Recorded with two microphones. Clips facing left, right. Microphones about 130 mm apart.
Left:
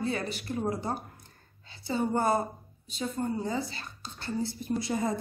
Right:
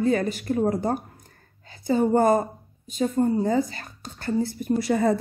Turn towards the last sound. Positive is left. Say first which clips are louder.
# right 8 dB
turn(degrees=-70)  # may be behind; listen again after turning